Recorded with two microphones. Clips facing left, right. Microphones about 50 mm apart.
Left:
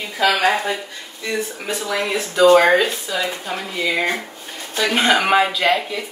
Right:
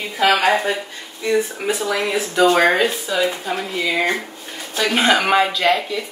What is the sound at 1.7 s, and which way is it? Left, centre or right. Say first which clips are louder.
Speech: even; centre.